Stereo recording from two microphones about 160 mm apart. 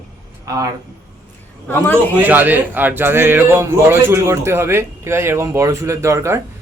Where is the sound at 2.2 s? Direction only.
10° right (ahead or behind).